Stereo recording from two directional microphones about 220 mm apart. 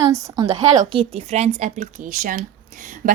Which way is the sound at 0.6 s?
30° right (ahead or behind).